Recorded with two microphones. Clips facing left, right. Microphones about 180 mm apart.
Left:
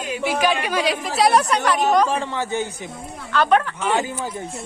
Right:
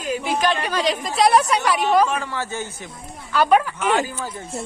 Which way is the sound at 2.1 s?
25° left (ahead or behind).